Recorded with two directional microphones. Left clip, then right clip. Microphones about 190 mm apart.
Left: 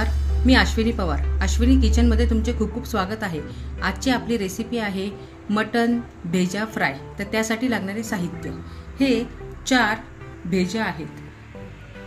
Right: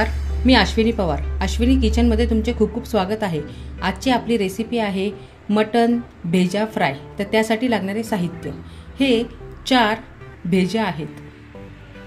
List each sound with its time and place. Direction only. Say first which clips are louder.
0.0 s speech: right 4 dB; 10° right (ahead or behind); by 11.0 s 25° right (ahead or behind)